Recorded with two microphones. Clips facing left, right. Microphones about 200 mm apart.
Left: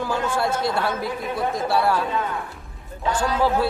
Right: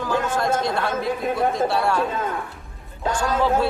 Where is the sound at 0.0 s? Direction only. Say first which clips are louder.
Right 1 dB; 10° left (ahead or behind).